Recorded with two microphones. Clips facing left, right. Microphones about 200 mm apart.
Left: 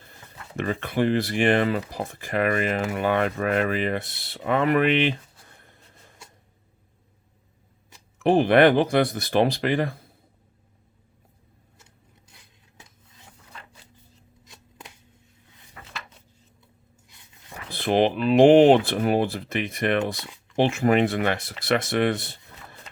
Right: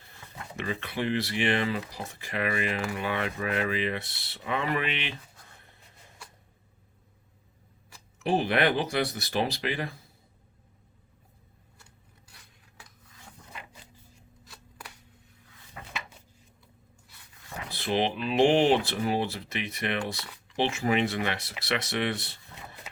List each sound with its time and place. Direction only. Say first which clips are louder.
0.5 s speech: left 7 dB; 50° left (ahead or behind)
8.2 s speech: left 9 dB; 55° left (ahead or behind)
14.4 s shuffling cards: left 1 dB; 20° left (ahead or behind)
17.7 s speech: left 7 dB; 55° left (ahead or behind)